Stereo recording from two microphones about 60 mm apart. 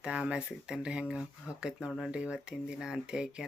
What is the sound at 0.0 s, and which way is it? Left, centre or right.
Speech, centre.